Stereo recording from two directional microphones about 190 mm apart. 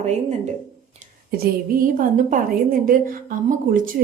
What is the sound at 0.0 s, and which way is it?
Speech, 35° right (ahead or behind).